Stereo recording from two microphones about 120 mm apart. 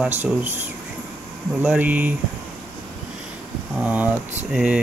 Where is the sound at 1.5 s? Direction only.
15° right (ahead or behind).